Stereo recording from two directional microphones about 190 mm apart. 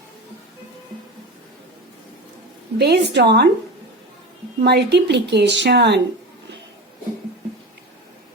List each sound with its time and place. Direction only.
2.7 s speech: 60° right (ahead or behind)
4.6 s speech: 60° right (ahead or behind)